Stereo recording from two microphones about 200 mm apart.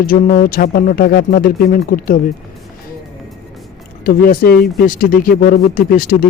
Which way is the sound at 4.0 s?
45° left (ahead or behind).